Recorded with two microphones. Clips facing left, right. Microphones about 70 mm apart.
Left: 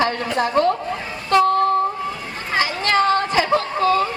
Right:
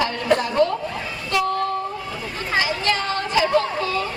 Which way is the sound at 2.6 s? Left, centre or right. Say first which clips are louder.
Left 5 dB; left.